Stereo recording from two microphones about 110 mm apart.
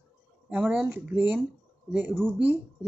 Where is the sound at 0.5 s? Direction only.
15° right (ahead or behind).